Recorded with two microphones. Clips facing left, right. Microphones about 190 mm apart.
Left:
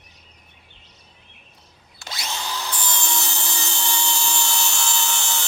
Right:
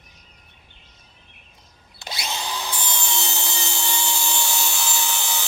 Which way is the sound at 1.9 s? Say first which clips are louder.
Right 1 dB; 15° right (ahead or behind).